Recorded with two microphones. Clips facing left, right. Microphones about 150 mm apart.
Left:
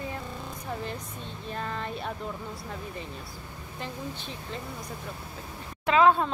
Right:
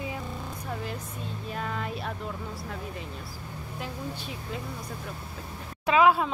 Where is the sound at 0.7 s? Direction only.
5° right (ahead or behind).